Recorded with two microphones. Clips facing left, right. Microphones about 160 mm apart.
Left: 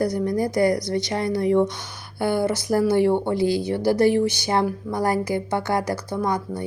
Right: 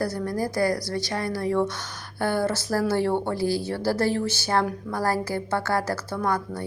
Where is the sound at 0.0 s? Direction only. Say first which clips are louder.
Left 5 dB; 20° left (ahead or behind).